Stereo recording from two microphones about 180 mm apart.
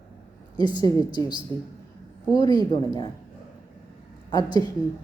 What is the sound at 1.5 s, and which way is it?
Speech, 20° left (ahead or behind).